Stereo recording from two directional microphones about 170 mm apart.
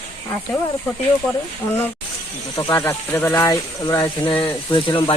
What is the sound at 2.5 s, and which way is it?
Speech, 20° left (ahead or behind).